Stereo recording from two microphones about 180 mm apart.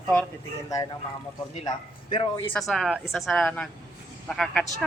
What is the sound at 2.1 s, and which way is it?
Speech, 25° left (ahead or behind).